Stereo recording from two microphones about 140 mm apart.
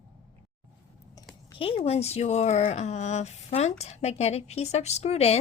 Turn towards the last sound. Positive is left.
turn(degrees=50)  # may be behind; listen again after turning